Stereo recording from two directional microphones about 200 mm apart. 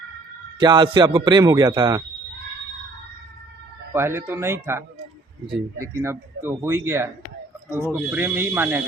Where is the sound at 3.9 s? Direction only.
10° right (ahead or behind).